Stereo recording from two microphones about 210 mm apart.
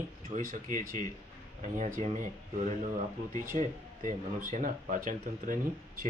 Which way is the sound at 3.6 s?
40° right (ahead or behind).